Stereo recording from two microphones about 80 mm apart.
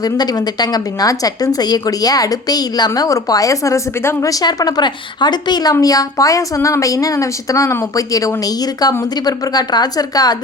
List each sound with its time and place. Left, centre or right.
0.0 s a woman's voice: left
5.8 s a woman's voice: left